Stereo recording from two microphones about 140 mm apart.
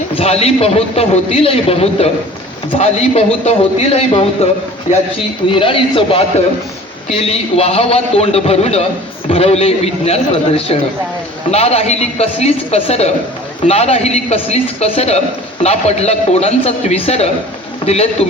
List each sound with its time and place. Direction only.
0.2 s a man's voice: 45° left (ahead or behind)
5.5 s a man's voice: 40° left (ahead or behind)